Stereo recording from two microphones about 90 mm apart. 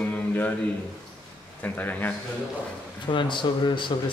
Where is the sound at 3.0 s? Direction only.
60° left (ahead or behind).